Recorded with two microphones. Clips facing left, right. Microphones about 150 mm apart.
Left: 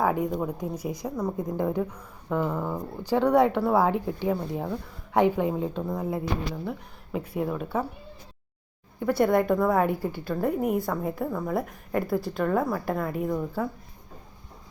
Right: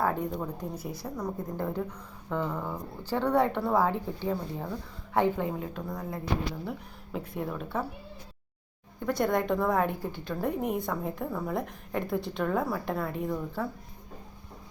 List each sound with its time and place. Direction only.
0.0 s a woman's voice: 10° left (ahead or behind)
6.7 s a woman's voice: centre (ahead or behind)
9.0 s a woman's voice: 5° left (ahead or behind)